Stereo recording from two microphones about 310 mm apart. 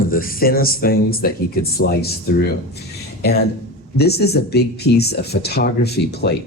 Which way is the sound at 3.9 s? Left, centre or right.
Left.